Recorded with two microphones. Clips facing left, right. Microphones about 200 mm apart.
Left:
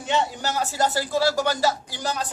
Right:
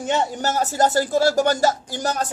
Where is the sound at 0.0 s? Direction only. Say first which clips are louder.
Right 3 dB; 45° right (ahead or behind).